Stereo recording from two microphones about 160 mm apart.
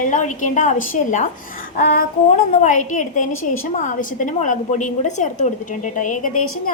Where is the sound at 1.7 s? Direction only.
70° left (ahead or behind).